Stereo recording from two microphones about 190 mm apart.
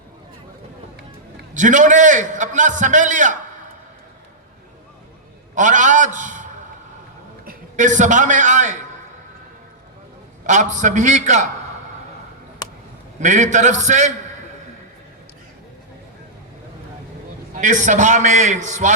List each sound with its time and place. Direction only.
1.5 s a man's voice: 40° right (ahead or behind)
5.5 s a man's voice: 40° right (ahead or behind)
10.4 s a man's voice: 40° right (ahead or behind)
13.1 s a man's voice: 40° right (ahead or behind)
17.5 s a man's voice: 40° right (ahead or behind)